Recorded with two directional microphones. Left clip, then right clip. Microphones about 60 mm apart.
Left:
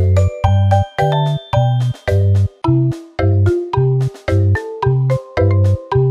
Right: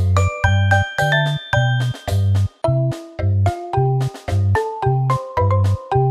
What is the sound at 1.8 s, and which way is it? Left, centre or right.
Music, centre.